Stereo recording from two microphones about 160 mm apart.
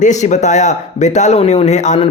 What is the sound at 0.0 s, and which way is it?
Speech, 50° left (ahead or behind).